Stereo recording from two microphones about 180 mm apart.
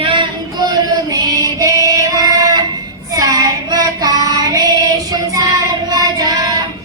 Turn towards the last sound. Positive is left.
turn(degrees=-20)  # may be behind; listen again after turning